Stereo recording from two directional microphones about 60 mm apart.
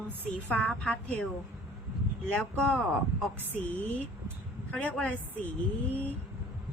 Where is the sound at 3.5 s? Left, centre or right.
Left.